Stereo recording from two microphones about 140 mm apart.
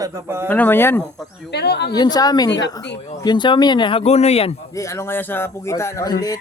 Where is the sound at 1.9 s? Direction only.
30° left (ahead or behind); by 4.5 s 45° left (ahead or behind).